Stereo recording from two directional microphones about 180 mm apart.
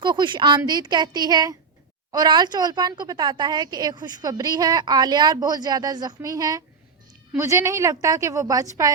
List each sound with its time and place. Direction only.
0.0 s a woman's voice: 25° right (ahead or behind)